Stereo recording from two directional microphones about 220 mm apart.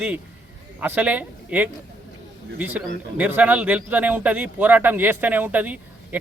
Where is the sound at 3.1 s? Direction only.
5° right (ahead or behind).